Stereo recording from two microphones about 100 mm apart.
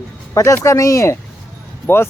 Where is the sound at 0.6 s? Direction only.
30° left (ahead or behind).